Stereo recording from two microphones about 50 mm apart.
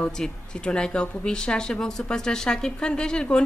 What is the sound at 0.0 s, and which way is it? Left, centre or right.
Speech, centre.